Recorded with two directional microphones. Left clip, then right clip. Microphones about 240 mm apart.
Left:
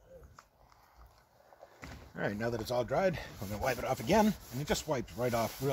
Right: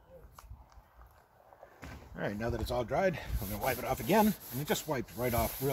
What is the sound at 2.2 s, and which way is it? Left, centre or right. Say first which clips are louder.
Speech: left 1 dB; left.